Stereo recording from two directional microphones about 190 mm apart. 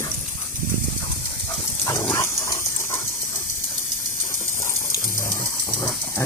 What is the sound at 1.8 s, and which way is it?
Dog, 15° left (ahead or behind).